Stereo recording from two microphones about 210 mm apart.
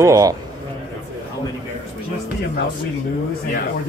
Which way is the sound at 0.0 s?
15° right (ahead or behind).